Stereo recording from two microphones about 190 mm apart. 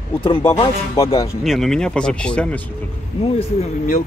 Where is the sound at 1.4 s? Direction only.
Centre (ahead or behind).